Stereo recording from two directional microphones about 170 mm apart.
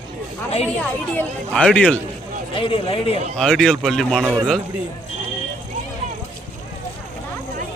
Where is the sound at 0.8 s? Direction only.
10° left (ahead or behind).